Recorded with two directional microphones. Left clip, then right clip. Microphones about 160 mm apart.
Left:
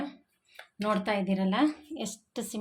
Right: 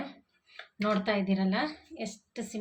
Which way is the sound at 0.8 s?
40° left (ahead or behind).